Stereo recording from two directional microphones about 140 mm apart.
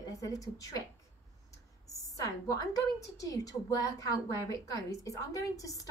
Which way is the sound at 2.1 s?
25° left (ahead or behind).